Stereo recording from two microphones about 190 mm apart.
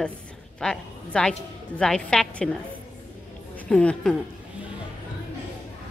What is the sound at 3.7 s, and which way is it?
Speech, 5° left (ahead or behind).